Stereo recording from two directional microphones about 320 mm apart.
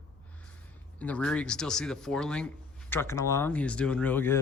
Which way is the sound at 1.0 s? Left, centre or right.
Centre.